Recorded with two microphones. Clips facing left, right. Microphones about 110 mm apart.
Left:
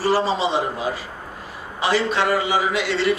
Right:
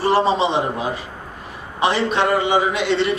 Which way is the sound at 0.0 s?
20° right (ahead or behind).